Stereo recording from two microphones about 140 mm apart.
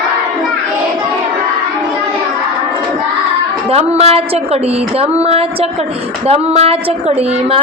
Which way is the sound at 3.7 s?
45° right (ahead or behind).